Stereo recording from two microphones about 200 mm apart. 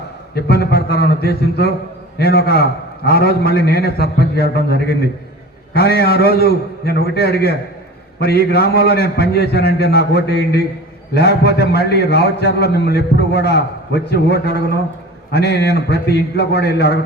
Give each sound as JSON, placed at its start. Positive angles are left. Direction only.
{"t": 0.4, "sound": "a man's voice", "side_deg": 50}
{"t": 6.0, "sound": "a man's voice", "side_deg": 50}